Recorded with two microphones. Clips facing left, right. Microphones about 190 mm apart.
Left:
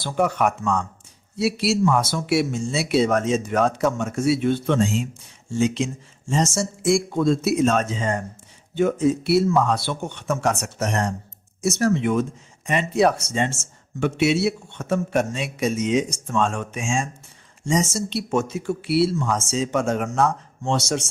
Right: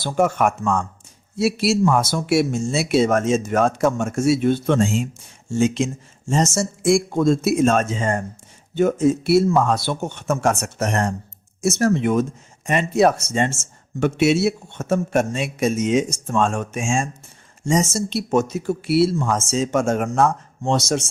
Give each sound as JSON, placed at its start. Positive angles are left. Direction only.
{"t": 0.0, "sound": "speech", "side_deg": -45}